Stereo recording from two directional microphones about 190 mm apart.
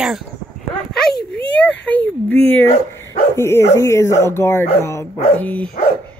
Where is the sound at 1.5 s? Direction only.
5° left (ahead or behind).